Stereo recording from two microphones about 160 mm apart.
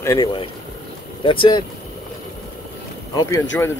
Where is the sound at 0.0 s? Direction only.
20° left (ahead or behind).